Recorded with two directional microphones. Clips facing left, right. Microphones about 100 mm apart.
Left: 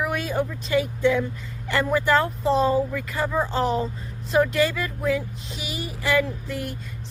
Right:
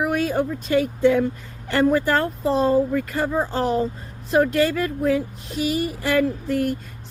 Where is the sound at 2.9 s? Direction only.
45° right (ahead or behind).